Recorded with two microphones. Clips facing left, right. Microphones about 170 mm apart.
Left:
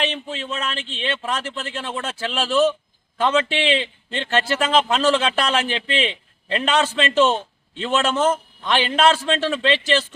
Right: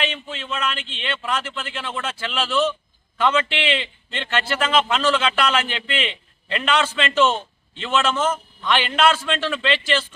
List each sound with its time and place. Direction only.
0.0 s a man's voice: 35° left (ahead or behind)